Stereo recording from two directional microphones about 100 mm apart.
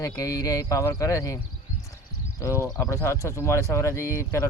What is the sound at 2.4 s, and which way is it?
Speech, 30° left (ahead or behind).